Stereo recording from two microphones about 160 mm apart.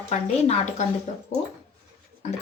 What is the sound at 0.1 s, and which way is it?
Speech, 45° left (ahead or behind).